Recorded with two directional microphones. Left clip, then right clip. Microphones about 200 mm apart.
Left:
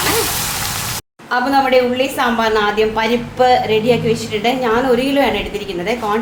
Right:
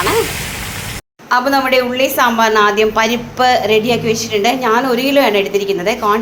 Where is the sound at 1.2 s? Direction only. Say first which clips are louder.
Right 1 dB; 20° right (ahead or behind).